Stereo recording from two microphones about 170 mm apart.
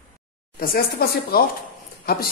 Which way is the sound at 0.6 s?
65° left (ahead or behind).